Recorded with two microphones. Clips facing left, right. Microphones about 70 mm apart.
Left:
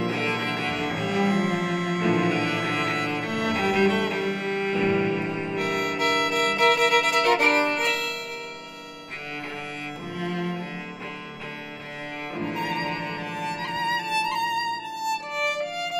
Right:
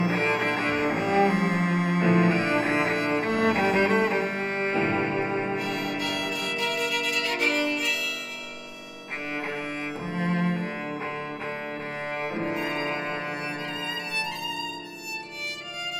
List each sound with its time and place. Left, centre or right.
0.0 s cello: right
5.6 s music: left
10.2 s cello: right
12.4 s music: right
13.9 s music: left
15.0 s violin: left